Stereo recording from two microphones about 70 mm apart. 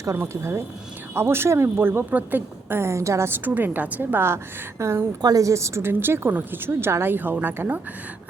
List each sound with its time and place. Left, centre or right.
0.2 s a woman's voice: right
2.0 s a woman's voice: right
3.4 s a woman's voice: right
5.2 s a woman's voice: right